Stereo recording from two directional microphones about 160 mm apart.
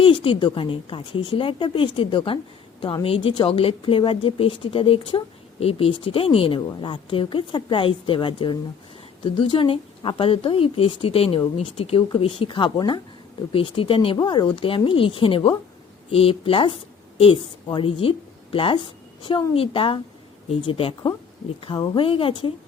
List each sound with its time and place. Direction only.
0.0 s speech: 30° left (ahead or behind)